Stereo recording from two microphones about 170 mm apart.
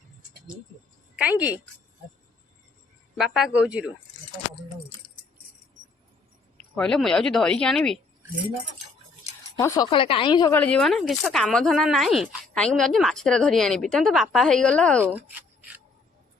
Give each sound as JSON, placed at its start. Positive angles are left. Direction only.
{"t": 1.1, "sound": "speech", "side_deg": -5}
{"t": 3.2, "sound": "speech", "side_deg": -5}
{"t": 6.7, "sound": "speech", "side_deg": 5}
{"t": 9.6, "sound": "speech", "side_deg": 20}
{"t": 9.9, "sound": "a woman's voice", "side_deg": 30}
{"t": 10.5, "sound": "speech", "side_deg": 10}